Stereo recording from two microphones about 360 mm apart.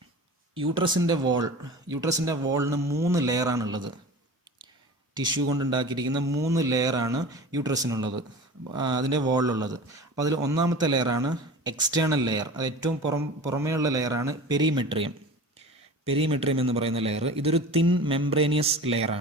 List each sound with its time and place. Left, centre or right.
0.5 s a man's voice: centre
5.7 s a man's voice: centre